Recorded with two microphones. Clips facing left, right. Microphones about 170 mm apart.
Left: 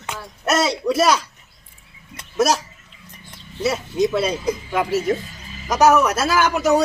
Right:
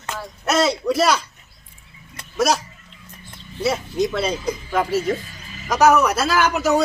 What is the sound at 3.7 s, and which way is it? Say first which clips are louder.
A woman's voice: left 1 dB; 5° left (ahead or behind).